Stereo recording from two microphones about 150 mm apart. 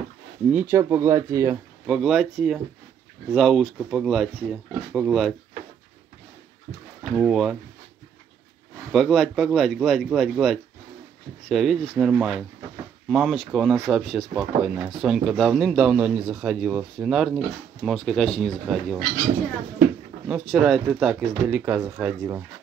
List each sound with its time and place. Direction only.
0.5 s speech: 15° right (ahead or behind)
1.9 s speech: centre (ahead or behind)
7.0 s speech: centre (ahead or behind)
8.9 s speech: centre (ahead or behind)
20.2 s speech: 5° right (ahead or behind)